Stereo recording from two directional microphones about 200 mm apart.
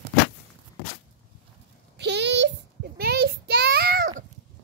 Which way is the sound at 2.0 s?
60° right (ahead or behind).